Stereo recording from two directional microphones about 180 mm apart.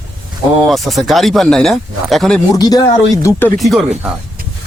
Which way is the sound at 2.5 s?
20° left (ahead or behind).